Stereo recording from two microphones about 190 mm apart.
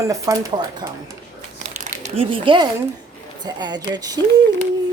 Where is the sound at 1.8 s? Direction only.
40° right (ahead or behind); by 4.2 s 20° right (ahead or behind).